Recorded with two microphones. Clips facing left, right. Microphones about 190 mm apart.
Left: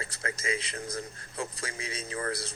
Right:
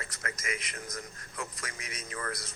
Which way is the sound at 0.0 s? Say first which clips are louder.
Left 4 dB; 30° left (ahead or behind).